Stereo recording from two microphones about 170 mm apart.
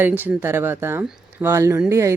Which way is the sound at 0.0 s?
10° right (ahead or behind).